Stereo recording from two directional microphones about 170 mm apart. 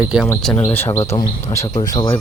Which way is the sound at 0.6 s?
10° left (ahead or behind).